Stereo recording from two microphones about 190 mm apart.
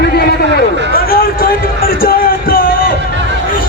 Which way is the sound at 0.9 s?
50° left (ahead or behind).